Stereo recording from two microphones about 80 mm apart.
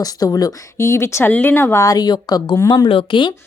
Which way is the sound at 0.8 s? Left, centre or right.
Left.